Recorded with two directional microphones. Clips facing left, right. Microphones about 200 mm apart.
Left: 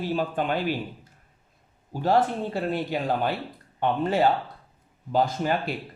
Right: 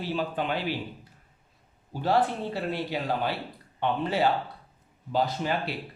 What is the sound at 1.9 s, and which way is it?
Speech, 45° left (ahead or behind).